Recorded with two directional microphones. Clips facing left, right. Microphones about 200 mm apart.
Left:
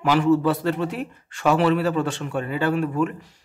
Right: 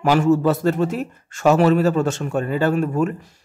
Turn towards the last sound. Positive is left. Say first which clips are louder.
# right 3 dB
turn(degrees=-45)  # may be behind; listen again after turning